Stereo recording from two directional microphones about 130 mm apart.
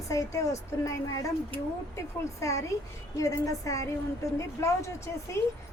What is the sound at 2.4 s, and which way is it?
Speech, 25° left (ahead or behind).